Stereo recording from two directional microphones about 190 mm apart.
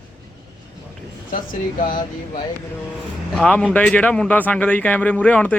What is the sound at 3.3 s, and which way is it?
Speech, 5° left (ahead or behind).